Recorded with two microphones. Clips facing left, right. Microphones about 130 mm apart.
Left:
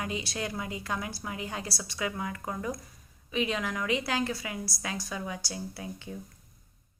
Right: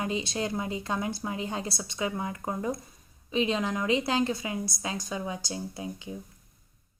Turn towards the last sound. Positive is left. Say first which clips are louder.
# right 3 dB
turn(degrees=-20)  # may be behind; listen again after turning